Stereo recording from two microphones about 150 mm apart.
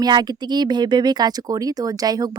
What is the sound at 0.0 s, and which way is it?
Speech, 30° right (ahead or behind).